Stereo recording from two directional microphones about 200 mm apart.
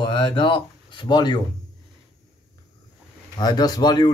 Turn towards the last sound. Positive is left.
turn(degrees=20)  # may be behind; listen again after turning